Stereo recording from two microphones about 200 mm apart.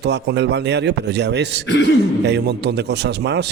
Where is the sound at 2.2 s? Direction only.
55° right (ahead or behind).